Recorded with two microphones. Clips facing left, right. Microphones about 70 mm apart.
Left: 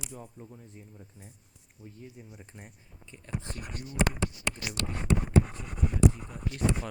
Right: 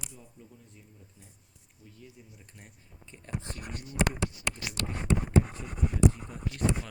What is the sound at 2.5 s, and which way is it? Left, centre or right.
Speech, left.